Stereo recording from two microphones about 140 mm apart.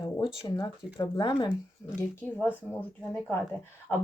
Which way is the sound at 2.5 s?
10° left (ahead or behind).